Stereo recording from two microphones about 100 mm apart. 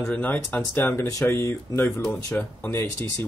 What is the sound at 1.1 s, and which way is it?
Speech, 30° left (ahead or behind).